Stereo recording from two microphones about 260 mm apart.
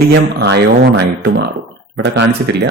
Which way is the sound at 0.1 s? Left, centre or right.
Right.